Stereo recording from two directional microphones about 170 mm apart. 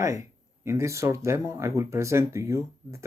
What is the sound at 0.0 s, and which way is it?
Speech, 15° right (ahead or behind).